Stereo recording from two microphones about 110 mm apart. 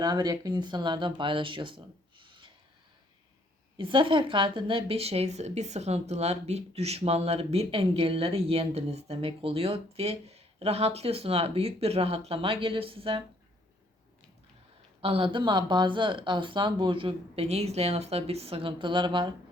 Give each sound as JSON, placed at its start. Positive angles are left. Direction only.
{"t": 0.0, "sound": "speech", "side_deg": -35}
{"t": 3.8, "sound": "a woman's voice", "side_deg": -50}
{"t": 15.0, "sound": "speech", "side_deg": -55}